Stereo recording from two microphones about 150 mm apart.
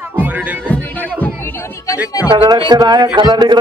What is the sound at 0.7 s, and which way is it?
Music, 10° left (ahead or behind).